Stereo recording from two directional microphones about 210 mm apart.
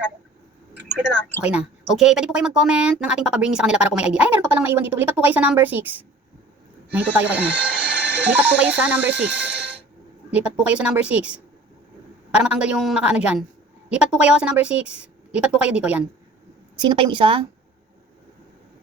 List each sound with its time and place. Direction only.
0.8 s a sound: 55° right (ahead or behind)
1.4 s a woman's voice: 5° right (ahead or behind)
7.6 s a sound: 5° right (ahead or behind)
8.3 s speech: 5° right (ahead or behind)
10.3 s a woman's voice: 5° right (ahead or behind)
12.3 s a woman's voice: 5° right (ahead or behind)
16.7 s a woman's voice: 20° right (ahead or behind)